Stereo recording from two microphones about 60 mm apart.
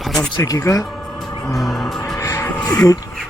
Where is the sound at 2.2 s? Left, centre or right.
Left.